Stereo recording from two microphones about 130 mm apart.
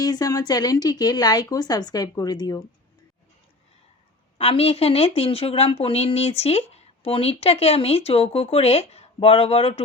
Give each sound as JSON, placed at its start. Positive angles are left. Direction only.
{"t": 0.0, "sound": "speech", "side_deg": 30}
{"t": 4.4, "sound": "a woman's voice", "side_deg": 50}